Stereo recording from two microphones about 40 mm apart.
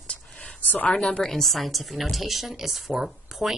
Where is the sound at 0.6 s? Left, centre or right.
Left.